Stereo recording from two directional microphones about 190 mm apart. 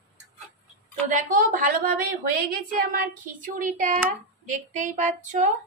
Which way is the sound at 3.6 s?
45° right (ahead or behind).